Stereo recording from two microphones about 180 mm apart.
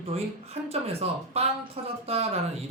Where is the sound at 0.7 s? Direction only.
35° right (ahead or behind).